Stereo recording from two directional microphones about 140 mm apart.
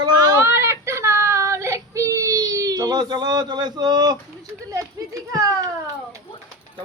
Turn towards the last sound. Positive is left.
turn(degrees=-25)  # may be behind; listen again after turning